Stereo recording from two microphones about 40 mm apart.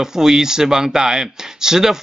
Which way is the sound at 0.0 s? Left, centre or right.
Centre.